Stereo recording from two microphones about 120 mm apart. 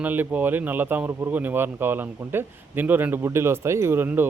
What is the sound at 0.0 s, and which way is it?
A man's voice, 15° right (ahead or behind).